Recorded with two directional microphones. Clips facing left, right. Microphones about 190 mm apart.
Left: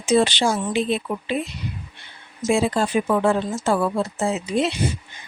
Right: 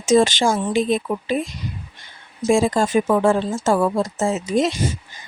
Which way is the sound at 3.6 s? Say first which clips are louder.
Right 3 dB; 45° right (ahead or behind).